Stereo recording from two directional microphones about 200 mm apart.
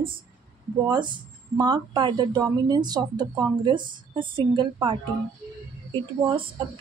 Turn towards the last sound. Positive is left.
turn(degrees=-25)  # may be behind; listen again after turning